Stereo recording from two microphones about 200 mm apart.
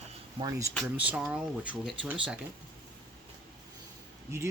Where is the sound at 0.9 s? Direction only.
5° right (ahead or behind).